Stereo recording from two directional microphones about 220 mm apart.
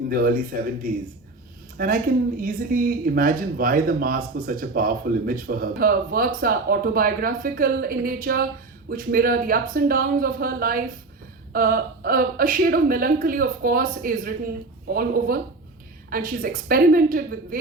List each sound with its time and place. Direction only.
0.1 s speech: 40° right (ahead or behind)
1.8 s speech: 40° right (ahead or behind)